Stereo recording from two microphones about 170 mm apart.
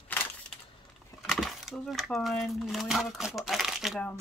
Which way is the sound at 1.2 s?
Centre (ahead or behind).